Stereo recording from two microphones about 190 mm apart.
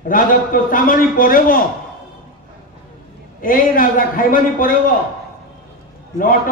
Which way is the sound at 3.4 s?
45° left (ahead or behind).